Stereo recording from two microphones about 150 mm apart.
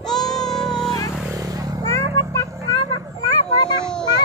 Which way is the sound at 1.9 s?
20° left (ahead or behind).